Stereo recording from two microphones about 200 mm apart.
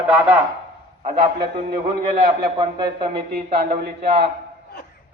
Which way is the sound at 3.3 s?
50° right (ahead or behind).